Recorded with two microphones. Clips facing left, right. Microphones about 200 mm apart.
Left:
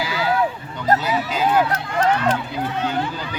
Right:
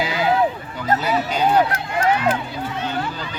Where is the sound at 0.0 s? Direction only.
20° right (ahead or behind).